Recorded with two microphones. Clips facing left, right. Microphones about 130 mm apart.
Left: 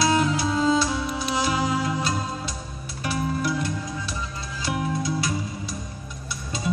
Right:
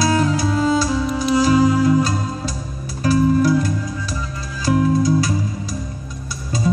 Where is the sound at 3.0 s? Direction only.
40° right (ahead or behind).